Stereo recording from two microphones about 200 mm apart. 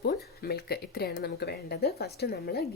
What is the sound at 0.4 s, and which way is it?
Speech, 50° left (ahead or behind).